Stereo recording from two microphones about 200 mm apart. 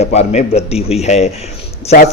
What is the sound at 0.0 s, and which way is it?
Speech, 35° left (ahead or behind).